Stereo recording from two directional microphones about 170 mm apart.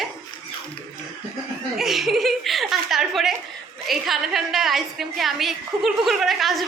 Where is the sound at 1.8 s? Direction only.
Centre (ahead or behind).